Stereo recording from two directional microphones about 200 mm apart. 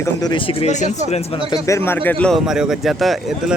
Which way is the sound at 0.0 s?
20° left (ahead or behind).